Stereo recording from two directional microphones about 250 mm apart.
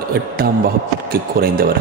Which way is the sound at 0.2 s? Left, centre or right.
Right.